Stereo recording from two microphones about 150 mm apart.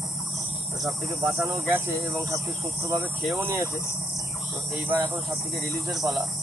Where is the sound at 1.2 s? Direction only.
15° right (ahead or behind).